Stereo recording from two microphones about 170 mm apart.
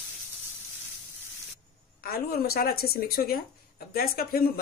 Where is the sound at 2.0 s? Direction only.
65° left (ahead or behind).